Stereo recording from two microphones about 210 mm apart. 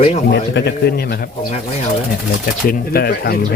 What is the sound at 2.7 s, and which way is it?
Speech, 45° left (ahead or behind).